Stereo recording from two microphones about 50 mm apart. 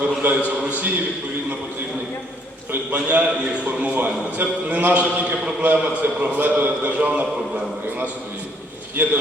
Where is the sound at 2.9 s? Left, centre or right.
Right.